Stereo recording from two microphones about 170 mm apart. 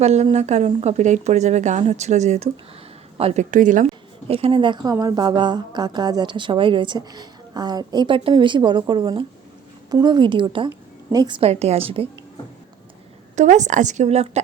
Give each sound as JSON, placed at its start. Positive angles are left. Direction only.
{"t": 0.0, "sound": "speech", "side_deg": -40}
{"t": 3.5, "sound": "a woman's voice", "side_deg": -50}
{"t": 4.3, "sound": "a woman's voice", "side_deg": -35}
{"t": 13.3, "sound": "a woman's voice", "side_deg": -45}